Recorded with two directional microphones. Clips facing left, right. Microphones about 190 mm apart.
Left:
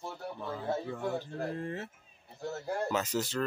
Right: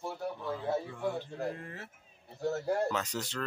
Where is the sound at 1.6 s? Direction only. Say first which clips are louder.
Left 8 dB; 25° left (ahead or behind).